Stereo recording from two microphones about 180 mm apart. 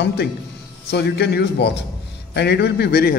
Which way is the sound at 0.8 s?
65° left (ahead or behind).